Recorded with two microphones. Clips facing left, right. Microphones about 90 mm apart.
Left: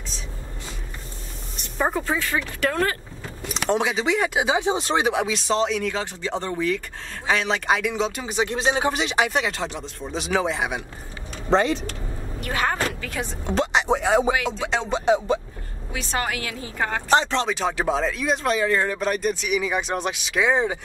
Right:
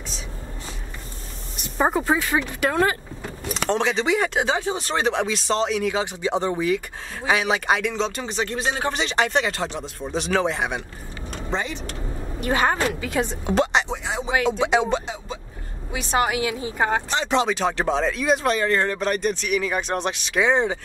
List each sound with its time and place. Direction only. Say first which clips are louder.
1.8 s speech: right 3 dB; 15° right (ahead or behind)
3.6 s speech: even; 10° left (ahead or behind)
4.6 s speech: left 3 dB; 20° left (ahead or behind); by 5.9 s 5° right (ahead or behind)
5.9 s speech: right 4 dB; 15° right (ahead or behind); by 8.9 s 20° left (ahead or behind)
8.9 s speech: right 1 dB; 5° left (ahead or behind)
11.5 s speech: left 8 dB; 90° left
12.4 s a woman's voice: right 3 dB; 20° right (ahead or behind)
13.5 s a sound: right 1 dB; centre (ahead or behind)
13.8 s speech: left 9 dB; 55° left (ahead or behind)
15.0 s speech: left 13 dB; 70° left (ahead or behind)
15.9 s speech: right 5 dB; 15° right (ahead or behind)
17.5 s speech: right 1 dB; centre (ahead or behind)